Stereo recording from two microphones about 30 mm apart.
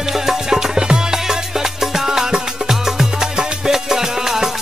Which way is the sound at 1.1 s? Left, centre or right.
Centre.